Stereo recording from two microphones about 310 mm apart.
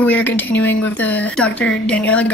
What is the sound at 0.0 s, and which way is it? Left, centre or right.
Speech, centre.